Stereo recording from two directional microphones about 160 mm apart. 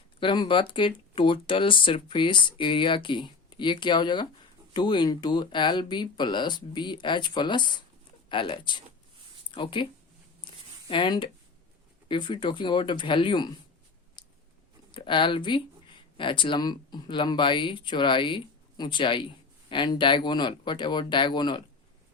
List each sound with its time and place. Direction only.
0.2 s speech: 30° left (ahead or behind)
10.8 s speech: 30° left (ahead or behind)
14.9 s speech: 30° left (ahead or behind)